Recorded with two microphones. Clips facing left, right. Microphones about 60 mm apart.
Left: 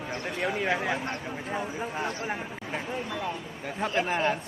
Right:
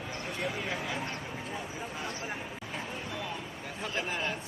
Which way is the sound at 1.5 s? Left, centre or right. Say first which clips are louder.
Left 10 dB; left.